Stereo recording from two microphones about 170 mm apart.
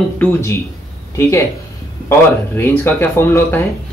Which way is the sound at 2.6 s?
15° left (ahead or behind).